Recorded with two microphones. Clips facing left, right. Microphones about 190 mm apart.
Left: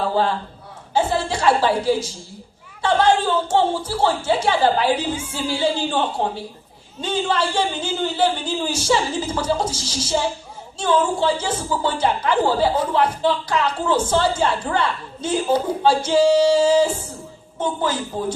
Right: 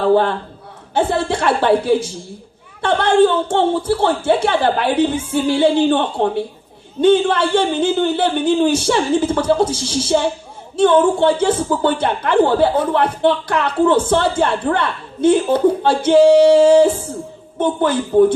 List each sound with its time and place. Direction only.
0.0 s a man's voice: 60° right (ahead or behind)